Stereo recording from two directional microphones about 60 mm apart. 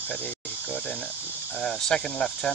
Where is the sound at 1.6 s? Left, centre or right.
Centre.